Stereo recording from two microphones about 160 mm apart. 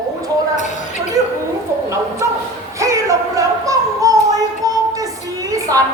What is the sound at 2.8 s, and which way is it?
Music, 20° right (ahead or behind).